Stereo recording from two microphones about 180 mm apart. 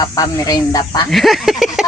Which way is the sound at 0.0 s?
20° left (ahead or behind).